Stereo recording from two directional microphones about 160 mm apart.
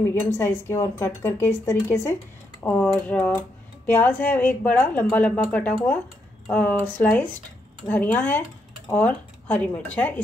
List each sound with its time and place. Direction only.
0.1 s speech: 15° left (ahead or behind)